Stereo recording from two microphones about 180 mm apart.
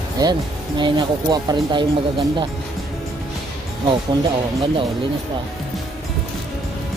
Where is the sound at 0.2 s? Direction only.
25° right (ahead or behind).